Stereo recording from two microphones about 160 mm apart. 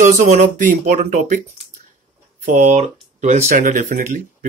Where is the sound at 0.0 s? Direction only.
50° right (ahead or behind).